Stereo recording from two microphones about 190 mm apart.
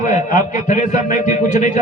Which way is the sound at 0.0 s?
40° left (ahead or behind).